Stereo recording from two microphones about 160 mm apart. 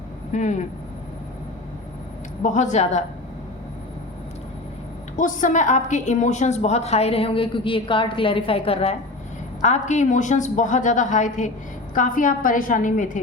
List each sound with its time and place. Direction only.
0.3 s a woman's voice: 50° left (ahead or behind)
2.4 s a woman's voice: 50° left (ahead or behind)
5.1 s a woman's voice: 55° left (ahead or behind)